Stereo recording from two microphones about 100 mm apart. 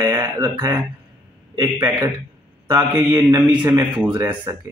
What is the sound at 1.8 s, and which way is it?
Speech, 40° right (ahead or behind).